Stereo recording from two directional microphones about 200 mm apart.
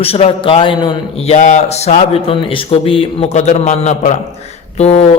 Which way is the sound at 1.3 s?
35° left (ahead or behind).